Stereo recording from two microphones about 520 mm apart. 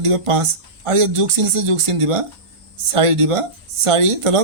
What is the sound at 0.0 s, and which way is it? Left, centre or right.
Speech, right.